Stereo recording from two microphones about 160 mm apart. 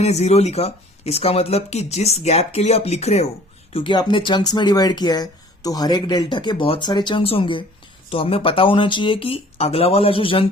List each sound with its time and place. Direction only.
0.0 s speech: 45° left (ahead or behind)